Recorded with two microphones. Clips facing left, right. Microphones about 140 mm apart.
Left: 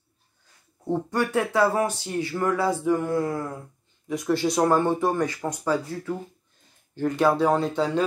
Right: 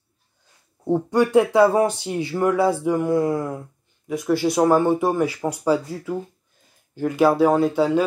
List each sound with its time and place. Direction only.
0.8 s speech: 15° right (ahead or behind)
4.1 s speech: centre (ahead or behind)